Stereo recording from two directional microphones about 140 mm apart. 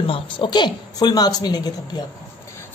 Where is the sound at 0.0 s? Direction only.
40° left (ahead or behind).